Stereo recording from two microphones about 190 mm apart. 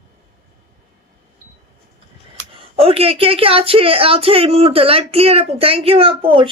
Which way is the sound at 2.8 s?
30° right (ahead or behind).